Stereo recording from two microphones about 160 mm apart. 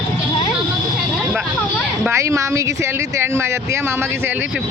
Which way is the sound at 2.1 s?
20° right (ahead or behind).